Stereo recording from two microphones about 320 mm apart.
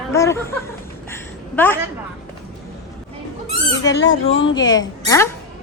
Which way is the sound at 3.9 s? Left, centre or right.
Left.